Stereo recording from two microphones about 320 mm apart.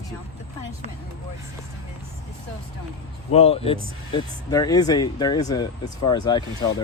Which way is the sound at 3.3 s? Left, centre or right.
Centre.